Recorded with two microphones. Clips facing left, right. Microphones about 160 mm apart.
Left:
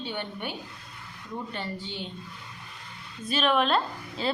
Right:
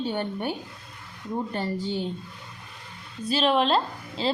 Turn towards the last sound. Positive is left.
turn(degrees=-30)  # may be behind; listen again after turning